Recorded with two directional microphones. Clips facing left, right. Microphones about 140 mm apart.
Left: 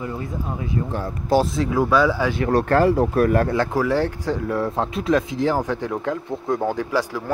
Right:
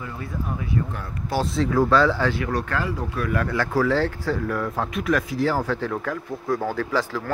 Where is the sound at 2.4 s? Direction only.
40° left (ahead or behind).